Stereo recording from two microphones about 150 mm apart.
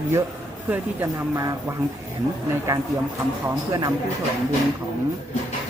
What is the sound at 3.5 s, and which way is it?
Speech, 20° right (ahead or behind).